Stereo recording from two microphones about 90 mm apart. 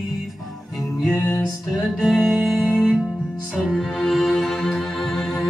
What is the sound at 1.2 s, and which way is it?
Music, 25° left (ahead or behind).